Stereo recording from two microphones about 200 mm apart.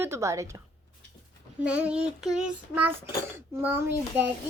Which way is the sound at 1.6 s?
5° right (ahead or behind).